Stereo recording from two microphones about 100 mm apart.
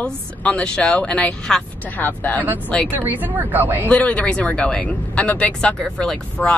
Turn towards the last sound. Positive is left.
turn(degrees=10)  # may be behind; listen again after turning